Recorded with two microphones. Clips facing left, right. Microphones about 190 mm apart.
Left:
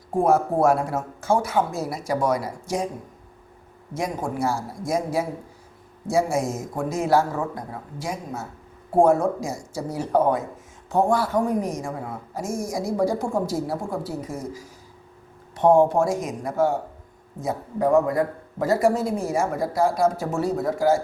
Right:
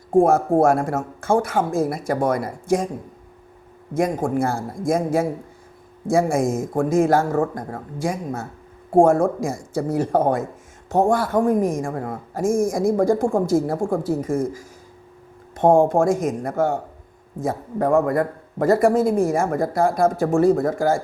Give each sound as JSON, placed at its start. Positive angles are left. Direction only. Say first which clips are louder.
{"t": 0.3, "sound": "speech", "louder": "right 2 dB", "side_deg": -50}
{"t": 3.9, "sound": "speech", "louder": "right 7 dB", "side_deg": -50}